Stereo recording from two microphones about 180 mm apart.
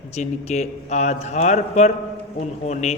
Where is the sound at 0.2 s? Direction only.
40° left (ahead or behind).